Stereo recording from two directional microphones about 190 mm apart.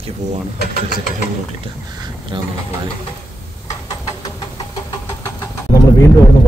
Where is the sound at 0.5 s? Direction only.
45° left (ahead or behind).